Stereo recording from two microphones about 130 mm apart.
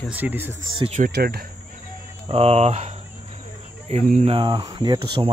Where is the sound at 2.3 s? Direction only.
50° right (ahead or behind).